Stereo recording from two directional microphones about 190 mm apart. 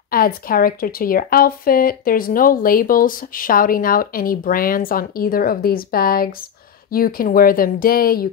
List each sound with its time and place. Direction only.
0.1 s speech: 50° left (ahead or behind)